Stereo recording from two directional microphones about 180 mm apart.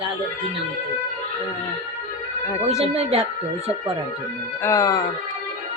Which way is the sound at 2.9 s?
35° right (ahead or behind).